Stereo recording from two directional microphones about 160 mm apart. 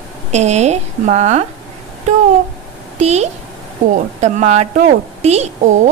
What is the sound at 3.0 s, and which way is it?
A woman's voice, 45° right (ahead or behind).